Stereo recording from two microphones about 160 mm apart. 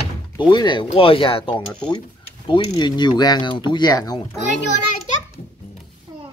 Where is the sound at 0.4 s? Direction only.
30° left (ahead or behind).